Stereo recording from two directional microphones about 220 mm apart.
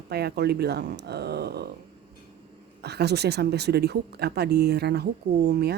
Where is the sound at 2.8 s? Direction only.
50° right (ahead or behind).